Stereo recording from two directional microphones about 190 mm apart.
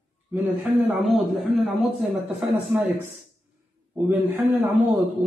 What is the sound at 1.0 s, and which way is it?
A woman's voice, centre (ahead or behind).